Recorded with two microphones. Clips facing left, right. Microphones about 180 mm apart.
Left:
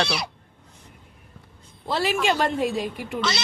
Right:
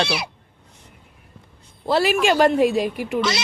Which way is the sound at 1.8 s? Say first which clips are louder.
Right 5 dB; 70° right (ahead or behind).